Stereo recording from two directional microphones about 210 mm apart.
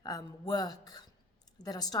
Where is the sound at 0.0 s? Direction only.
20° left (ahead or behind).